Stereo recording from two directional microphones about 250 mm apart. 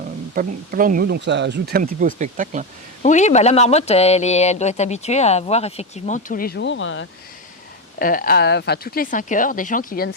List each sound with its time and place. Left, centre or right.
0.3 s speech: right
3.0 s speech: left
7.9 s speech: left